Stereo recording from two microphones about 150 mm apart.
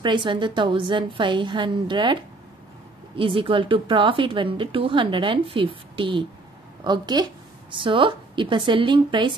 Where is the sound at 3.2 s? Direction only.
35° right (ahead or behind).